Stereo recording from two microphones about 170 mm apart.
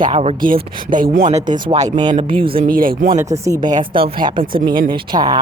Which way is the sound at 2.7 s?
55° right (ahead or behind).